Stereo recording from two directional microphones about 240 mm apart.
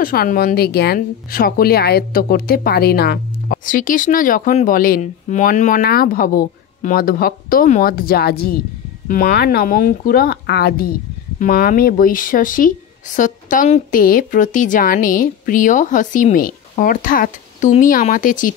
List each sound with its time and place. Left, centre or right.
0.0 s speech: left